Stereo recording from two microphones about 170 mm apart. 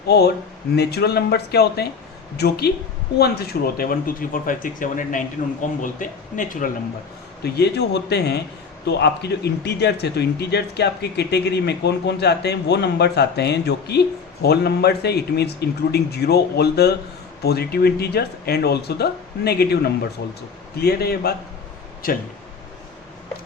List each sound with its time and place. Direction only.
0.1 s speech: 70° left (ahead or behind); by 6.7 s 50° left (ahead or behind)
7.4 s speech: 75° left (ahead or behind)